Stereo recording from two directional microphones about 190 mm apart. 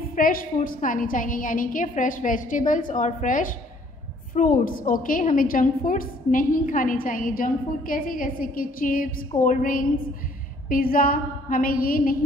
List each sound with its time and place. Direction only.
0.1 s a woman's voice: 50° left (ahead or behind)